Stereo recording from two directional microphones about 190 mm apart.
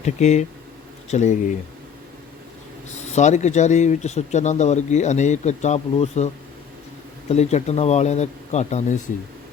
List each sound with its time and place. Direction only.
0.0 s speech: 35° left (ahead or behind)
3.1 s speech: 40° left (ahead or behind)